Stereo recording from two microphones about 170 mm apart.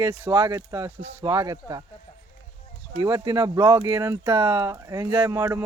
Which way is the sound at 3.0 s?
25° right (ahead or behind).